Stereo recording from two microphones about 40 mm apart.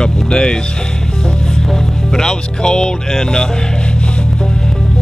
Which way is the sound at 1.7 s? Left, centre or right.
Centre.